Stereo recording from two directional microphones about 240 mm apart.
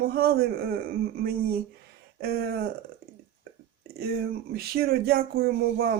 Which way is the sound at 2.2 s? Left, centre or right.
Right.